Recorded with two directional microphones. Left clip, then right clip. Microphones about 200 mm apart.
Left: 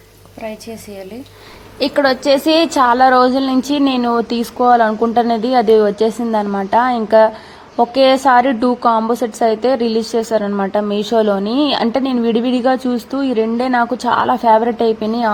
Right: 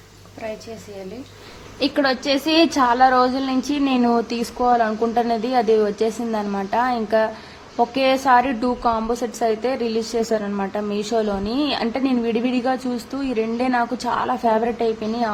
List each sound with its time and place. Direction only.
2.0 s a woman's voice: 25° left (ahead or behind)